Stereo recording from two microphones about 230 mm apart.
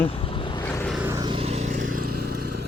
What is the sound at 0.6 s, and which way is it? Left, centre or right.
Vehicle, centre.